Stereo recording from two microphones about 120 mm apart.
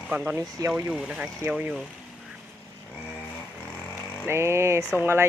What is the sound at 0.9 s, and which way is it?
Speech, 10° right (ahead or behind).